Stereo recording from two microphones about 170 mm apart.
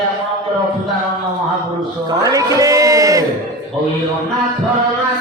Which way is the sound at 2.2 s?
20° right (ahead or behind).